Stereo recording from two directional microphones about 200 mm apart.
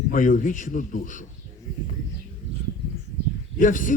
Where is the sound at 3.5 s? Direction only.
40° left (ahead or behind).